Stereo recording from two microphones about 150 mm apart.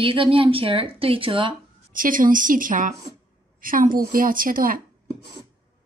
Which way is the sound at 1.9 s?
65° right (ahead or behind).